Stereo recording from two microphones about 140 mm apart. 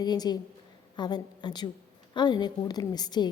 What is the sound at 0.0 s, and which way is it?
A woman's voice, 30° left (ahead or behind).